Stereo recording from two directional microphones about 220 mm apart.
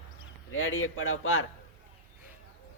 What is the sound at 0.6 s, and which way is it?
Speech, 65° left (ahead or behind).